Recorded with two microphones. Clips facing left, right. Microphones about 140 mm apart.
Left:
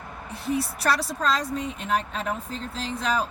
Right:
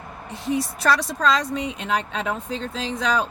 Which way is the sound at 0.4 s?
90° right.